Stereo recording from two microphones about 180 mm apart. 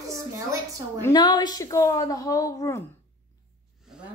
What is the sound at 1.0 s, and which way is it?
A woman's voice, 25° left (ahead or behind).